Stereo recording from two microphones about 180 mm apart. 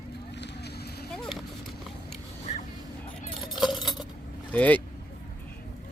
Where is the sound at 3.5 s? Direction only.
Centre (ahead or behind).